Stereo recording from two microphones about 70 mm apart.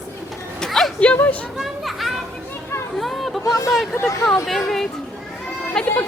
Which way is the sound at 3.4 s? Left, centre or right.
Left.